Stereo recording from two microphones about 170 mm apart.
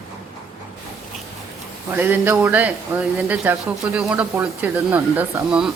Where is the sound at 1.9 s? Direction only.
15° right (ahead or behind).